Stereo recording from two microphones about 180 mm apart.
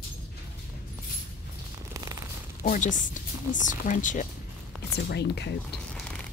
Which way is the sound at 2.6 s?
45° left (ahead or behind).